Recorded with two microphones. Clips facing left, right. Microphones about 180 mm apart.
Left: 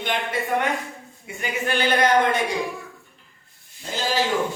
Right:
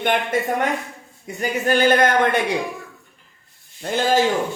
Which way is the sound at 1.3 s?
40° right (ahead or behind).